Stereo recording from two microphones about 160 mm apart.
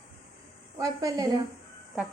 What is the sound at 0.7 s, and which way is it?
Speech, 20° right (ahead or behind).